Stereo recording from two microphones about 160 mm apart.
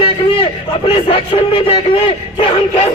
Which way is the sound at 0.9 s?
30° left (ahead or behind).